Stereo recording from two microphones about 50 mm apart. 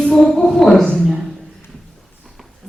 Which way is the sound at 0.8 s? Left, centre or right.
Centre.